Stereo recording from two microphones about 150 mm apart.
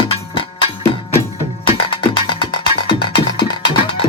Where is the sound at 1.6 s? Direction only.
35° left (ahead or behind).